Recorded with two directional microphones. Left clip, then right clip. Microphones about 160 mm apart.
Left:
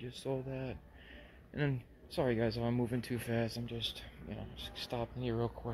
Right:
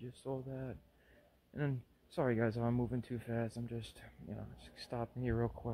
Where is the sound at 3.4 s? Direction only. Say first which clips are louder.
Left 6 dB; 30° right (ahead or behind).